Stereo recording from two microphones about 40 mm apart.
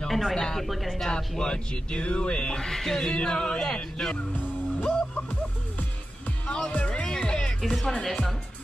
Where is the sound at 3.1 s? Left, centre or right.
Left.